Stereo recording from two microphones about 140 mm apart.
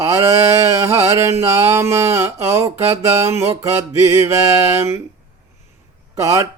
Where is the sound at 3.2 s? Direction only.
20° right (ahead or behind).